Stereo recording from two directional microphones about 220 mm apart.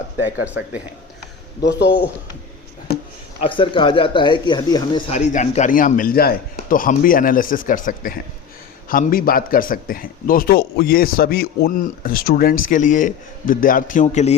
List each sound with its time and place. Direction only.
0.4 s speech: 5° right (ahead or behind)
1.6 s speech: 50° left (ahead or behind)
3.4 s a man's voice: 20° left (ahead or behind)